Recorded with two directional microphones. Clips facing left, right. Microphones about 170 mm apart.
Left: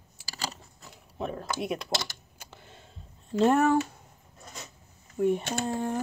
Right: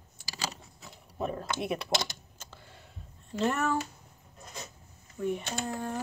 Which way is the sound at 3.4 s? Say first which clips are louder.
Left 7 dB; 50° left (ahead or behind).